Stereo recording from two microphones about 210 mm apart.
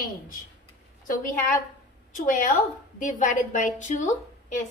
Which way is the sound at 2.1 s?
40° left (ahead or behind).